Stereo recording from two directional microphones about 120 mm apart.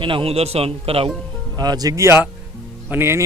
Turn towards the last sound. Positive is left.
turn(degrees=-20)  # may be behind; listen again after turning